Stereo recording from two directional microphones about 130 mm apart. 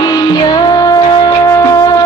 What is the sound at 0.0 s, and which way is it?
Music, 30° left (ahead or behind).